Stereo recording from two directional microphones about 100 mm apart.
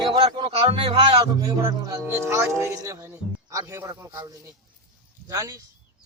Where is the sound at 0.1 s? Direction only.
65° right (ahead or behind).